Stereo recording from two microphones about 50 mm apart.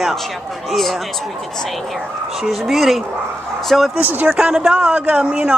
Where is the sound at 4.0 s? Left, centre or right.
Right.